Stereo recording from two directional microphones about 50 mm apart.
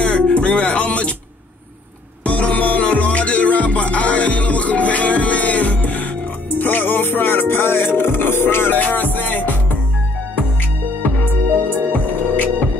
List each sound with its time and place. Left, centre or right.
0.0 s music: left
2.2 s music: left
8.7 s music: left